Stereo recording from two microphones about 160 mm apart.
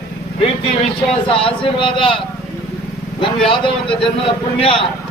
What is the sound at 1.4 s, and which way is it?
Speech, 35° left (ahead or behind).